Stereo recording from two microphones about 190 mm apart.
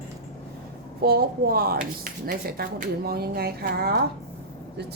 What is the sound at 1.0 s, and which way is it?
Speech, 55° right (ahead or behind).